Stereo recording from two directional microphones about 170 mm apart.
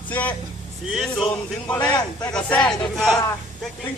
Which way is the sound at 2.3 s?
5° left (ahead or behind).